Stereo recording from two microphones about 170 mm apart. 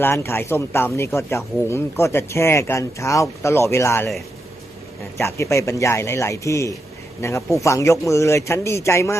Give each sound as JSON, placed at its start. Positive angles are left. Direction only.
{"t": 0.0, "sound": "speech", "side_deg": 15}
{"t": 5.2, "sound": "speech", "side_deg": 15}